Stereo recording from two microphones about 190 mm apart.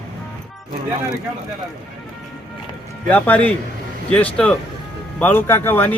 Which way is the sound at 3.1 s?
10° left (ahead or behind).